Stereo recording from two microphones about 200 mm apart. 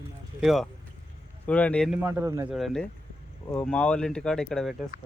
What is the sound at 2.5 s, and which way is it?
Speech, centre (ahead or behind).